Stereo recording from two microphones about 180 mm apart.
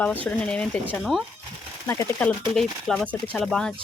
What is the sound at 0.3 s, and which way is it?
Speech, 5° left (ahead or behind).